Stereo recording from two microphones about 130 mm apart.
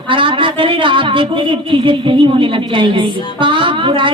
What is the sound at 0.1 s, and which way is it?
Speech, 40° right (ahead or behind).